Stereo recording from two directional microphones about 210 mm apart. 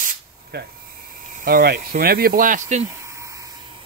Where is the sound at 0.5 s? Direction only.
50° right (ahead or behind).